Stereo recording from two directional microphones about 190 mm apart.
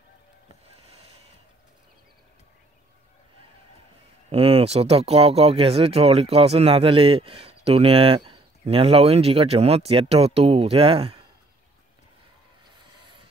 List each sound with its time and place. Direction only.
4.3 s speech: 30° right (ahead or behind)